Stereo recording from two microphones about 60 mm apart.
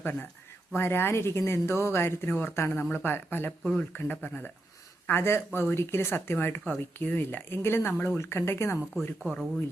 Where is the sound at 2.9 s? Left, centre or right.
Left.